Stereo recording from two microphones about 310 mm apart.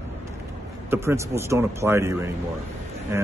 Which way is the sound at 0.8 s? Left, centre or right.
Centre.